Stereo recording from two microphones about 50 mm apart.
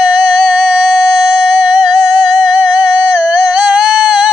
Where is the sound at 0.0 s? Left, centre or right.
Right.